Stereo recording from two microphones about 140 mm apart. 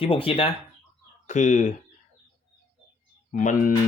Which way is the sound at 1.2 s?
60° left (ahead or behind).